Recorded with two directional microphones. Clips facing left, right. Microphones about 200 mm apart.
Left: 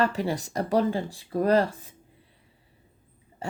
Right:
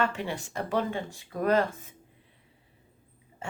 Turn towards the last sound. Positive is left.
turn(degrees=35)  # may be behind; listen again after turning